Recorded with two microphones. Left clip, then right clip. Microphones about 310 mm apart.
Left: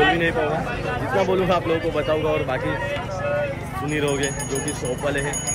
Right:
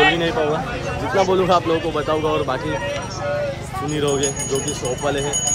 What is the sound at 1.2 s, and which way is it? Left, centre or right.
Speech, centre.